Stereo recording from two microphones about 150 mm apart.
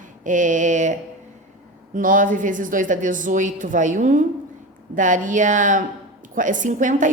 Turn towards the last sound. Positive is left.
turn(degrees=-60)  # may be behind; listen again after turning